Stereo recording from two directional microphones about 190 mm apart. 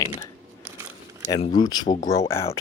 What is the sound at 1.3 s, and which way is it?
Speech, 25° left (ahead or behind).